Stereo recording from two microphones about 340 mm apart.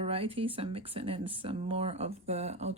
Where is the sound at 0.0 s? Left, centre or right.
Centre.